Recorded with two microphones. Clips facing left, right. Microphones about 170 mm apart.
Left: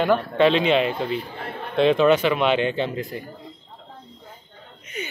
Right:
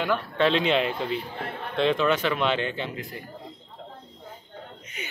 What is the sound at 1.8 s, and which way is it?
Speech, 15° left (ahead or behind).